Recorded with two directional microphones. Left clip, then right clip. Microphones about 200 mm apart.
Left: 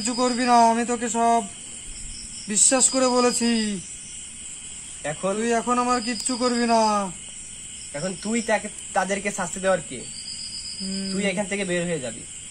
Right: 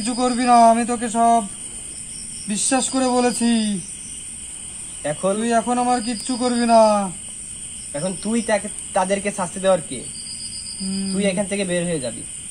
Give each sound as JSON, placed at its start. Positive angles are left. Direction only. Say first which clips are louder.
{"t": 0.0, "sound": "a man's voice", "louder": "right 3 dB", "side_deg": -10}
{"t": 2.4, "sound": "a man's voice", "louder": "even", "side_deg": -10}
{"t": 5.0, "sound": "speech", "louder": "right 5 dB", "side_deg": 20}
{"t": 5.4, "sound": "a man's voice", "louder": "right 1 dB", "side_deg": -5}
{"t": 7.9, "sound": "speech", "louder": "right 3 dB", "side_deg": 15}
{"t": 11.1, "sound": "speech", "louder": "right 4 dB", "side_deg": 20}